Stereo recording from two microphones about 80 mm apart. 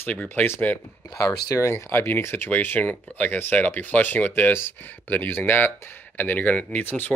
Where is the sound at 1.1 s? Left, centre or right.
Left.